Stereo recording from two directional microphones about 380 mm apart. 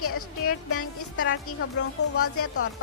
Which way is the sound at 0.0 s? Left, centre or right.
Left.